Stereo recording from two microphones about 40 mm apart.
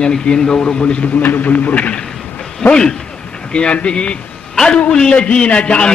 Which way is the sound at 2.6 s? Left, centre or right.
Left.